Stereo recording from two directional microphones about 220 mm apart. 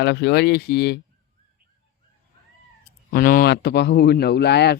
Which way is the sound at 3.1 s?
40° left (ahead or behind).